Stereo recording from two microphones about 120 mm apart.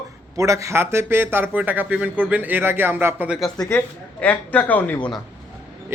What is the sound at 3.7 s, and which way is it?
Speech, 15° left (ahead or behind).